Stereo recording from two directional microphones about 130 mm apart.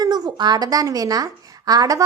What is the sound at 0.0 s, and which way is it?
A woman's voice, 30° right (ahead or behind).